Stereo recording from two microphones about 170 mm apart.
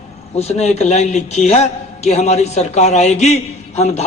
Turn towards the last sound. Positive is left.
turn(degrees=40)  # may be behind; listen again after turning